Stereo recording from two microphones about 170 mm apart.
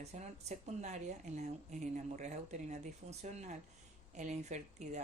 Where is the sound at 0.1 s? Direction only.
40° right (ahead or behind).